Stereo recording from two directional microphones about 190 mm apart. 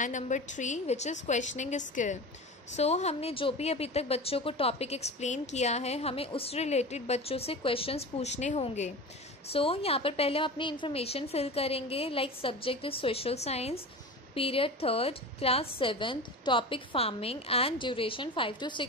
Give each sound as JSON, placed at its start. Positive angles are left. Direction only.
{"t": 0.0, "sound": "a woman's voice", "side_deg": 40}